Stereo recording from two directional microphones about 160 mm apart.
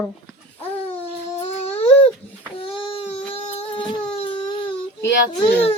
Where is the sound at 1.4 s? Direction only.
45° left (ahead or behind).